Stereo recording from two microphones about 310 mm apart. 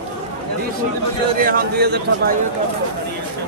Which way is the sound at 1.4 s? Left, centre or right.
Right.